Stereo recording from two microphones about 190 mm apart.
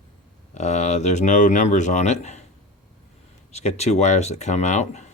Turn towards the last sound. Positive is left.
turn(degrees=35)  # may be behind; listen again after turning